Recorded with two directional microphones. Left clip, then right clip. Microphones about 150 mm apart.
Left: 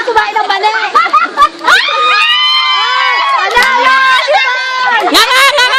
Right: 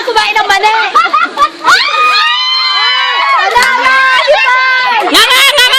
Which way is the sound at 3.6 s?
65° right (ahead or behind).